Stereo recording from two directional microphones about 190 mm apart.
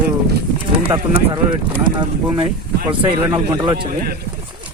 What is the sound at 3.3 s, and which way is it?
Speech, 20° right (ahead or behind).